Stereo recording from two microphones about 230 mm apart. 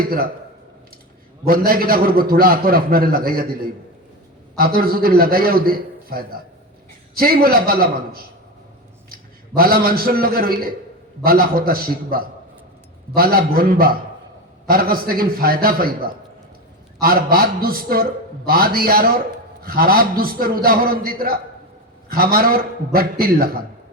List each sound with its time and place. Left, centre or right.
0.0 s a man's voice: right
1.5 s a man's voice: right
4.5 s a man's voice: right
9.6 s a man's voice: right